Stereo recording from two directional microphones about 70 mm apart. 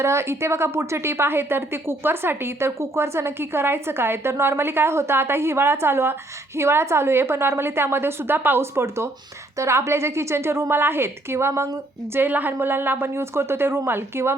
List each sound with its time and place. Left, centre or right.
0.0 s a woman's voice: right
12.1 s a woman's voice: right